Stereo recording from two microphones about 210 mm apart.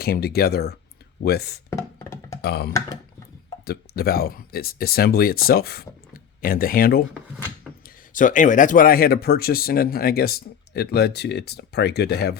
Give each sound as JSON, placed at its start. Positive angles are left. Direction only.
{"t": 0.0, "sound": "speech", "side_deg": 45}
{"t": 1.7, "sound": "music", "side_deg": 15}
{"t": 2.4, "sound": "speech", "side_deg": 50}
{"t": 3.7, "sound": "speech", "side_deg": 45}
{"t": 8.1, "sound": "speech", "side_deg": 40}